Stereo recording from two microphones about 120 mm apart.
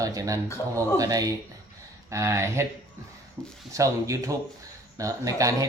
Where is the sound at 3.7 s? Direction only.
25° right (ahead or behind).